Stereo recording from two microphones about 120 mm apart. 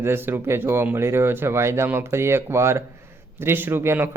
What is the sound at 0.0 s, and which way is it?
Speech, 20° right (ahead or behind).